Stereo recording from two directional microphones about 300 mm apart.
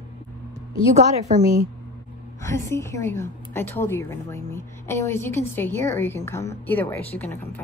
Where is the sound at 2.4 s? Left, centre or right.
Centre.